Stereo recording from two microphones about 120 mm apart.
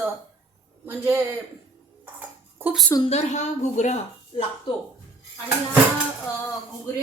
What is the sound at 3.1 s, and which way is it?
Speech, 70° left (ahead or behind).